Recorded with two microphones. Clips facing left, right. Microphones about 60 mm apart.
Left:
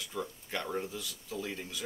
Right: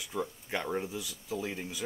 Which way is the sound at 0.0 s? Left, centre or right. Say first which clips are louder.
Right 3 dB; centre.